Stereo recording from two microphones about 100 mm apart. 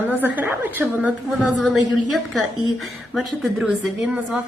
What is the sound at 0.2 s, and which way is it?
Speech, 20° right (ahead or behind).